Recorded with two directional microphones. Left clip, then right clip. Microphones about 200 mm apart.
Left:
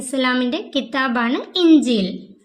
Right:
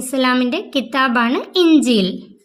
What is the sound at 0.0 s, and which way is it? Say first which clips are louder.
A woman's voice: right 3 dB; 30° right (ahead or behind).